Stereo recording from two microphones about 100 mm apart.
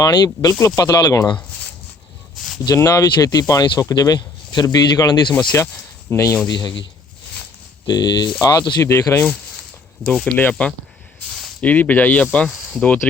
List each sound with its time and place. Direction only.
0.0 s speech: 35° left (ahead or behind)
2.6 s speech: 35° left (ahead or behind)
5.3 s speech: 15° left (ahead or behind)
6.1 s speech: 30° left (ahead or behind)
6.5 s speech: 40° left (ahead or behind)
7.9 s speech: 45° left (ahead or behind)
10.0 s speech: 10° left (ahead or behind)
11.6 s speech: 15° left (ahead or behind)